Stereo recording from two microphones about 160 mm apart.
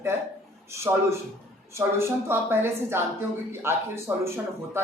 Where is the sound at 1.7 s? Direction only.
15° right (ahead or behind).